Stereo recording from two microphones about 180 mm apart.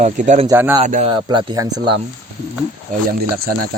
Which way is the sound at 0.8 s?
45° right (ahead or behind).